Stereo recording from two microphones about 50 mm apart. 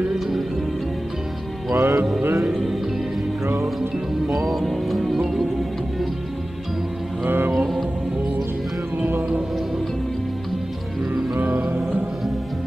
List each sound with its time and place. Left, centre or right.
1.7 s music: right
2.4 s music: centre
4.5 s speech: centre
7.2 s music: right
7.5 s music: centre
11.3 s music: right